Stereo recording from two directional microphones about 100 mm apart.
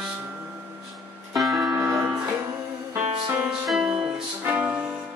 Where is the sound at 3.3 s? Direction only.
15° right (ahead or behind).